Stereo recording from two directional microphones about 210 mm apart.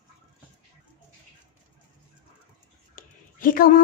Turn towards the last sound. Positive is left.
turn(degrees=40)  # may be behind; listen again after turning